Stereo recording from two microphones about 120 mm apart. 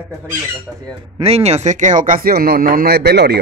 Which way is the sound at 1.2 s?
60° right (ahead or behind).